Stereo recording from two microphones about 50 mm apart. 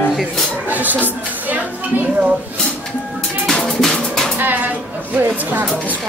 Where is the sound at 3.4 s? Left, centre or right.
Centre.